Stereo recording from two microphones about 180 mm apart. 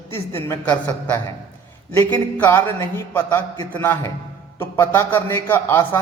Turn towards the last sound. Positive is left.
turn(degrees=15)  # may be behind; listen again after turning